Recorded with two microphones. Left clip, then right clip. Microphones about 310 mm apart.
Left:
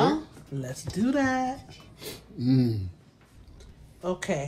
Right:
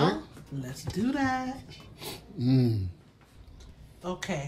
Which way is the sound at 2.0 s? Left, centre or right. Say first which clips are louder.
Even; centre.